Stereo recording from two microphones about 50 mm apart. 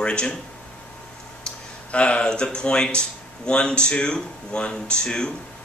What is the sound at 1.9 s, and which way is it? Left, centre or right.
Speech, left.